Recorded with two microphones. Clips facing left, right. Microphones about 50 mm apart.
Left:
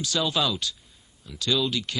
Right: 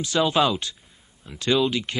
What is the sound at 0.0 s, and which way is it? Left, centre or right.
Speech, right.